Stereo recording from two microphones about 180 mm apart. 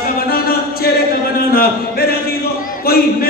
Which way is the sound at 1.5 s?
60° left (ahead or behind).